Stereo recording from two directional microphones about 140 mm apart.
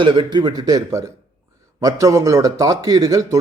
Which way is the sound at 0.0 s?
35° right (ahead or behind).